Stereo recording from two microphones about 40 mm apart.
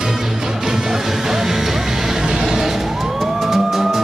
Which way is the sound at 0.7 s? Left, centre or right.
Centre.